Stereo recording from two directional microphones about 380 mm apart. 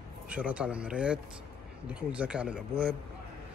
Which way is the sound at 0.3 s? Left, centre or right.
Centre.